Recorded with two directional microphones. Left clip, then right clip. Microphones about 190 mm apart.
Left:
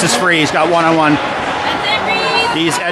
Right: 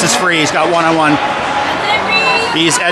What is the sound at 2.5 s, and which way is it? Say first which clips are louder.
Speech: right 3 dB; 10° right (ahead or behind).